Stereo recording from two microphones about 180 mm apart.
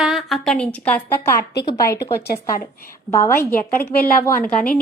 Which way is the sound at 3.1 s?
15° left (ahead or behind).